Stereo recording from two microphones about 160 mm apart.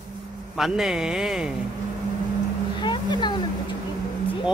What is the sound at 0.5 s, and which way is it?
Speech, centre (ahead or behind).